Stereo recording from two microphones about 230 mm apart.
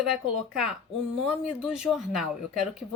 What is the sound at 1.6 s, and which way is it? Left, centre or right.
Speech, centre.